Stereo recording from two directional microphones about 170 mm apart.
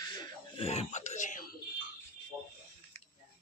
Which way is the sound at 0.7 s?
40° left (ahead or behind).